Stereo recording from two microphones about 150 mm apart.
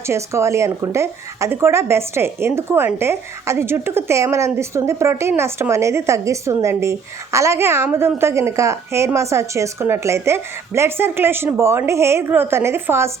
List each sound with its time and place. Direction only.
0.1 s a woman's voice: 20° right (ahead or behind)